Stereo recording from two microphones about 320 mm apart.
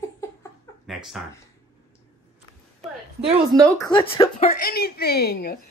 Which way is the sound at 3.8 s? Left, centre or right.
Centre.